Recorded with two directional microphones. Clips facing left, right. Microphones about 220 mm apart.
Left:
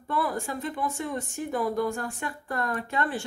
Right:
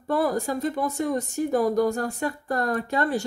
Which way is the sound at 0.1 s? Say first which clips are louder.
Right 6 dB; 40° right (ahead or behind).